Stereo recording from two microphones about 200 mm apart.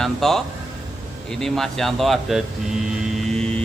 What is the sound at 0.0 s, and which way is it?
Speech, centre (ahead or behind).